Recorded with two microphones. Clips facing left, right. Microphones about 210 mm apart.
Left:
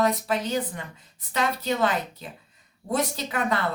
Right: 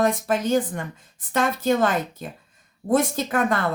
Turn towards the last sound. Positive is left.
turn(degrees=-50)  # may be behind; listen again after turning